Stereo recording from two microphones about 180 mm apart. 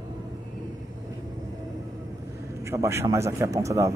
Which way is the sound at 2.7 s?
15° right (ahead or behind).